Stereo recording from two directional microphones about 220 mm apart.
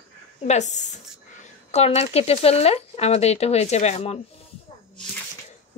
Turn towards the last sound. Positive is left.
turn(degrees=30)  # may be behind; listen again after turning